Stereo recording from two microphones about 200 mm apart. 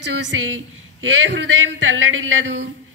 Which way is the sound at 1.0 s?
70° right (ahead or behind).